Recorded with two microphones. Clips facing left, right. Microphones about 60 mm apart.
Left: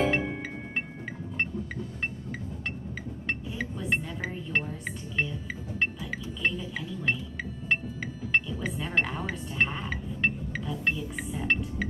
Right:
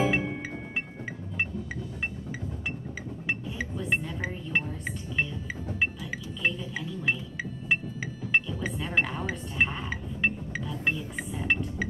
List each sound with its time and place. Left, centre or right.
0.0 s music: centre
3.3 s music: centre